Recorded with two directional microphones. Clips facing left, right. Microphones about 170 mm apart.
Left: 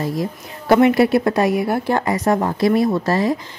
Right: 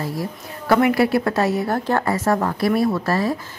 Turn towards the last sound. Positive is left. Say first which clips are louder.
# left 2 dB
turn(degrees=20)  # may be behind; listen again after turning